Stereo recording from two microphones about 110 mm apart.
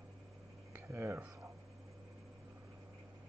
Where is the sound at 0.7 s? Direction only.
25° right (ahead or behind).